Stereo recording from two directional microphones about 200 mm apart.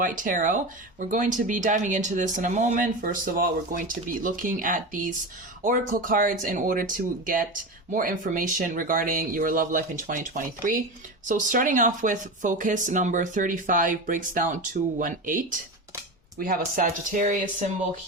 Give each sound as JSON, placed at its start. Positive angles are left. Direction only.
{"t": 0.0, "sound": "speech", "side_deg": -40}